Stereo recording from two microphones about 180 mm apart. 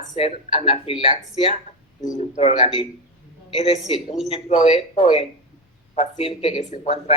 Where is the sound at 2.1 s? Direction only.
35° left (ahead or behind).